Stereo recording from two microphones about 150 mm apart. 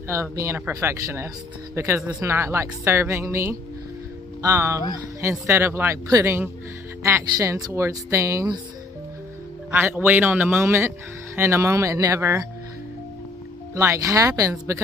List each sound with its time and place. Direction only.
0.1 s a woman's voice: 20° right (ahead or behind)
9.7 s a woman's voice: 15° right (ahead or behind)
13.7 s speech: 20° right (ahead or behind)